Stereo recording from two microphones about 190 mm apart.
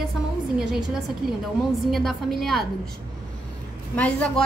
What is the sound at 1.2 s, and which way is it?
Speech, 50° right (ahead or behind).